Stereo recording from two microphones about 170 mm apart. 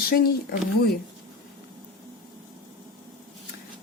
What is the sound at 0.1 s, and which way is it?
Speech, 65° left (ahead or behind).